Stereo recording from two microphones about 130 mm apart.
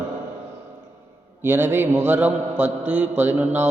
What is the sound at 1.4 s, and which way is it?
Mantra, 15° right (ahead or behind).